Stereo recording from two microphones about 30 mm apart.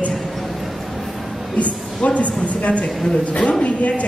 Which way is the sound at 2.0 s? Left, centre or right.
Left.